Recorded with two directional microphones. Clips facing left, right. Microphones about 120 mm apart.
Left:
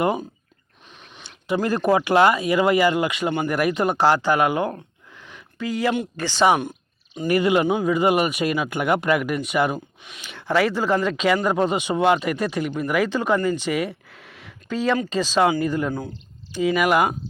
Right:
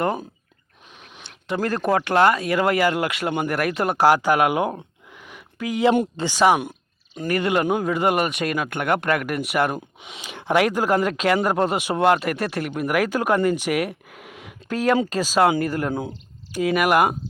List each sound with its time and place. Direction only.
0.0 s speech: 5° left (ahead or behind)
5.3 s a sound: 10° right (ahead or behind)
6.1 s speech: 15° right (ahead or behind)
6.4 s speech: 5° right (ahead or behind)
10.0 s speech: 20° right (ahead or behind)
15.9 s speech: 20° right (ahead or behind)
16.5 s speech: 5° right (ahead or behind)